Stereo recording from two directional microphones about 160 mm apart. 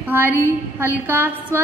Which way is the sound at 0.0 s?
10° right (ahead or behind).